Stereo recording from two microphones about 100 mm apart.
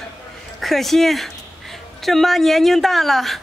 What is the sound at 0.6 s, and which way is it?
A woman's voice, centre (ahead or behind).